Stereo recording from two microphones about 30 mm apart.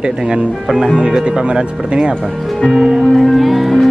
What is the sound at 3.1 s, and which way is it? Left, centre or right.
Speech, centre.